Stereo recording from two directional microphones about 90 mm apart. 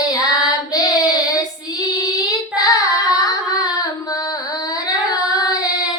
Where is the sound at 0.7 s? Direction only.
45° left (ahead or behind).